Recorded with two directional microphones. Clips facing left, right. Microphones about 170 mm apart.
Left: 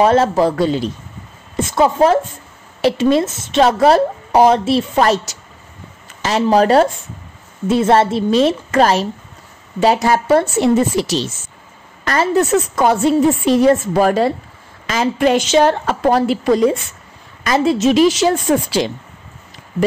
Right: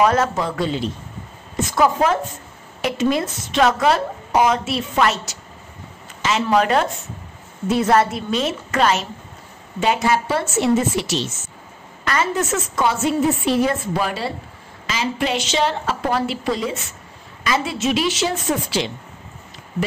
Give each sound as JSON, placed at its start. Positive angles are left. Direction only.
{"t": 0.0, "sound": "a woman's voice", "side_deg": 30}
{"t": 1.6, "sound": "a woman's voice", "side_deg": 25}